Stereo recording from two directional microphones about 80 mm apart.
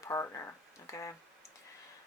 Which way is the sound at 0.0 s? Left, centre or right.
Left.